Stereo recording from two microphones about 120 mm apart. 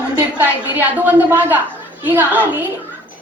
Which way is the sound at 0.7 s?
15° right (ahead or behind).